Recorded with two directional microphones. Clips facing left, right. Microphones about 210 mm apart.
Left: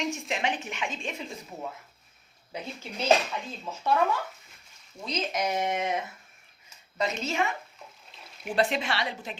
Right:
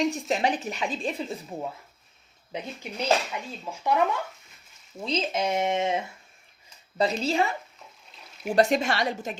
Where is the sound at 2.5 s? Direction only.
20° right (ahead or behind).